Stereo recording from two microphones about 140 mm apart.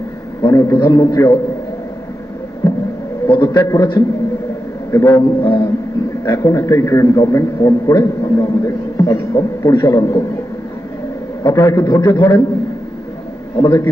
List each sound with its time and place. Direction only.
0.4 s a man's voice: 25° left (ahead or behind)
2.6 s heart sounds: 30° left (ahead or behind)
3.2 s a man's voice: 30° left (ahead or behind)
11.4 s a man's voice: 30° left (ahead or behind)
13.6 s a man's voice: 30° left (ahead or behind)